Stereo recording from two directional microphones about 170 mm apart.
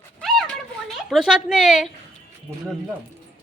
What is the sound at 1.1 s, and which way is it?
Speech, centre (ahead or behind).